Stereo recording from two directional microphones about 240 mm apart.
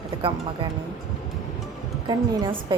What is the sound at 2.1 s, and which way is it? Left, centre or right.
Speech, centre.